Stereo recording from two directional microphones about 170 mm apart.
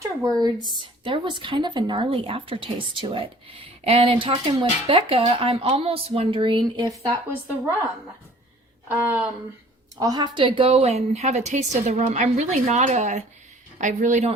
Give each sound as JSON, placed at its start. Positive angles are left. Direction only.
{"t": 0.3, "sound": "a woman's voice", "side_deg": -25}
{"t": 8.9, "sound": "a woman's voice", "side_deg": -10}
{"t": 10.0, "sound": "a woman's voice", "side_deg": -25}